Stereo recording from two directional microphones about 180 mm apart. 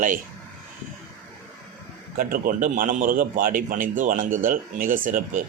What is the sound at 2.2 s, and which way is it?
A man's voice, 55° right (ahead or behind).